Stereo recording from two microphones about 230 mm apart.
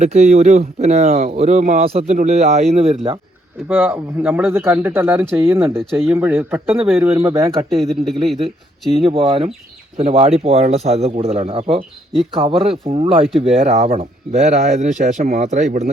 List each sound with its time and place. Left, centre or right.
0.0 s speech: right
3.7 s speech: centre
7.8 s speech: centre
9.0 s speech: right